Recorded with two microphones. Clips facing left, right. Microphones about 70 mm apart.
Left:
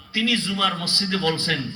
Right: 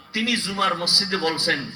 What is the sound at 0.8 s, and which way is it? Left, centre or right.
Speech, right.